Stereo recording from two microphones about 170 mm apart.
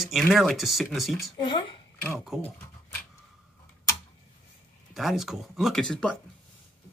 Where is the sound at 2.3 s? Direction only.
Centre (ahead or behind).